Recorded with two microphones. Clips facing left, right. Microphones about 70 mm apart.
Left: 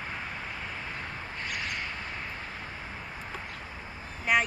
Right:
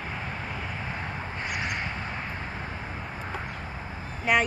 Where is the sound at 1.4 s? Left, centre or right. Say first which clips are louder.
Right 3 dB; centre.